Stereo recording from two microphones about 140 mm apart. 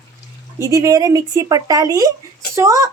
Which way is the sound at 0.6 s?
25° right (ahead or behind).